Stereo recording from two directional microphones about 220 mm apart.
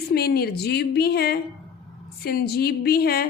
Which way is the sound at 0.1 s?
45° left (ahead or behind).